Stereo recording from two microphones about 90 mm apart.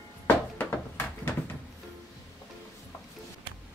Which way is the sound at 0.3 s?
20° left (ahead or behind).